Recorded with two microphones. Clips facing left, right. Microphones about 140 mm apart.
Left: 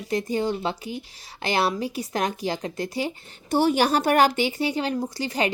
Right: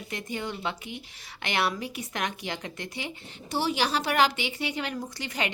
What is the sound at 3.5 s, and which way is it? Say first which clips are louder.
A woman's voice: left 7 dB; 50° left (ahead or behind).